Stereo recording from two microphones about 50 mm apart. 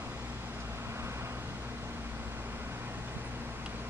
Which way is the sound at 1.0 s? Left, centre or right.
Right.